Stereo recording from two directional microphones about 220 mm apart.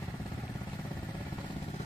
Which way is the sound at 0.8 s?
5° left (ahead or behind).